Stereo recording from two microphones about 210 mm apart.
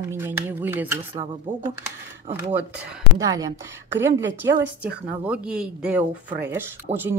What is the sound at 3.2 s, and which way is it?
Speech, 15° right (ahead or behind).